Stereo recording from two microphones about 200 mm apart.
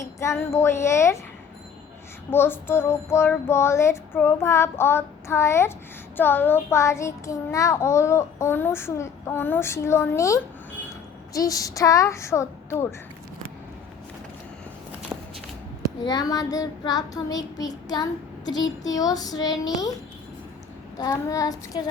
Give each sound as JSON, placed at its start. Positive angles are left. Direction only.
{"t": 0.0, "sound": "child singing", "side_deg": 15}
{"t": 2.3, "sound": "child singing", "side_deg": 10}
{"t": 16.0, "sound": "child singing", "side_deg": 20}
{"t": 21.0, "sound": "child singing", "side_deg": 15}